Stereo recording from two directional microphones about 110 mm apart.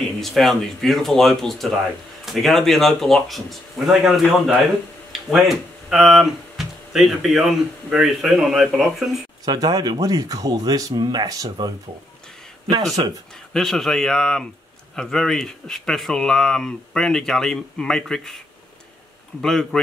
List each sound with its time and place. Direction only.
0.2 s speech: centre (ahead or behind)
9.4 s speech: 35° right (ahead or behind)
13.5 s speech: 5° left (ahead or behind)
19.4 s speech: 5° left (ahead or behind)